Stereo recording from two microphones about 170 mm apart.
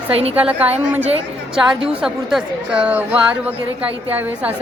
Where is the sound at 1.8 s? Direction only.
5° right (ahead or behind).